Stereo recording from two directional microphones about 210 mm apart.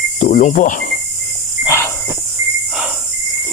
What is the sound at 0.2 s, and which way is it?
Cricket, 35° left (ahead or behind).